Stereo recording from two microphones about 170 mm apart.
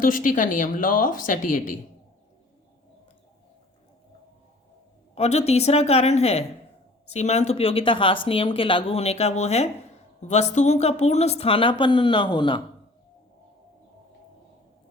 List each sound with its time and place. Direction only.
0.0 s speech: 55° left (ahead or behind)
5.1 s speech: 40° left (ahead or behind)